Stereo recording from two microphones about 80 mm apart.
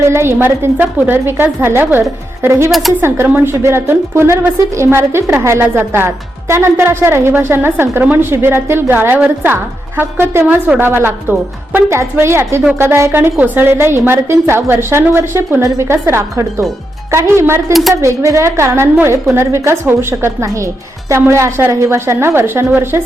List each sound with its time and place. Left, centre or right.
0.1 s a woman's voice: right